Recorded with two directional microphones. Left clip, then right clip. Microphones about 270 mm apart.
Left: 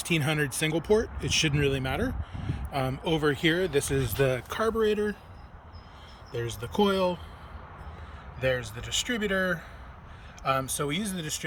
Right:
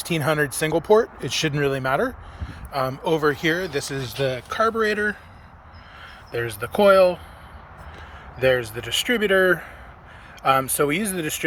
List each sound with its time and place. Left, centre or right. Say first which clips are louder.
0.0 s speech: right 6 dB; centre
6.3 s speech: right 7 dB; centre
8.4 s speech: right 9 dB; centre